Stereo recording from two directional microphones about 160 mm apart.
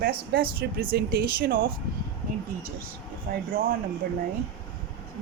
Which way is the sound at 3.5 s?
70° right (ahead or behind).